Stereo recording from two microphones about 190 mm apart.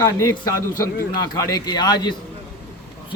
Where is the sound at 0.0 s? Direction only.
15° left (ahead or behind).